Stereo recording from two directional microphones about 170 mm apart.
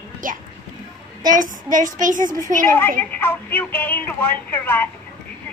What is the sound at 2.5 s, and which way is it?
Speech, 10° left (ahead or behind).